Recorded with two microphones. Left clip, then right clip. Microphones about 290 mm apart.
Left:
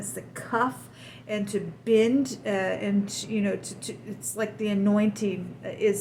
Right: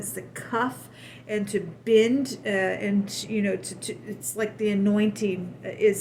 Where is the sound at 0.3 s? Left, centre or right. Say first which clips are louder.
Left 1 dB; centre.